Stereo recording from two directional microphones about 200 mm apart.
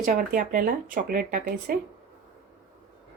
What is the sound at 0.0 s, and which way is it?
Speech, 40° right (ahead or behind).